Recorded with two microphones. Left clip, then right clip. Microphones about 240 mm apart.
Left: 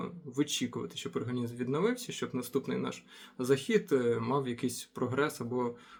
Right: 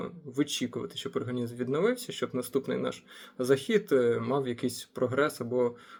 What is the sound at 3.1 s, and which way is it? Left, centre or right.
Speech, left.